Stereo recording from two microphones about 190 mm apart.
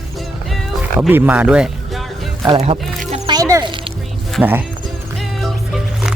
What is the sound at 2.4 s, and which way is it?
Music, 30° right (ahead or behind).